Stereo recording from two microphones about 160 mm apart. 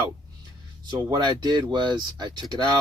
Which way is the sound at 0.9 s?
25° right (ahead or behind).